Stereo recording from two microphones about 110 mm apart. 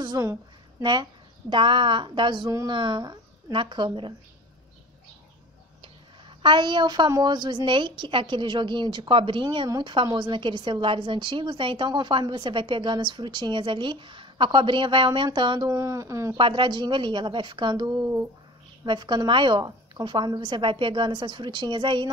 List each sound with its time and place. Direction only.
0.0 s a woman's voice: 40° right (ahead or behind)
1.5 s a woman's voice: 45° right (ahead or behind)
5.8 s a sound: 45° right (ahead or behind)
7.1 s a woman's voice: 40° right (ahead or behind)
15.8 s speech: 30° right (ahead or behind)
16.3 s a woman's voice: 50° right (ahead or behind)